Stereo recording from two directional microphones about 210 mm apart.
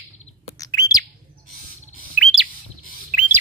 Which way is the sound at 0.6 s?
15° left (ahead or behind).